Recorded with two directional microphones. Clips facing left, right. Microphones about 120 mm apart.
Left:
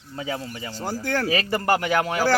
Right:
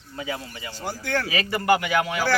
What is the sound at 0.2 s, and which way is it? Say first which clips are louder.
A man's voice: left 2 dB; 30° left (ahead or behind).